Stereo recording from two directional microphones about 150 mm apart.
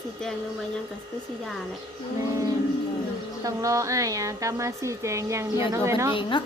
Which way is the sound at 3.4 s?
20° right (ahead or behind).